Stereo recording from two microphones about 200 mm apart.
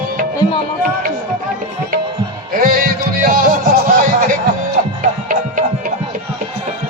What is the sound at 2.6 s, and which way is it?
Music, 45° right (ahead or behind).